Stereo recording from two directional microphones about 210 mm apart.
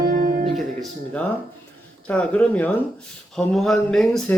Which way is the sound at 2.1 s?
5° left (ahead or behind).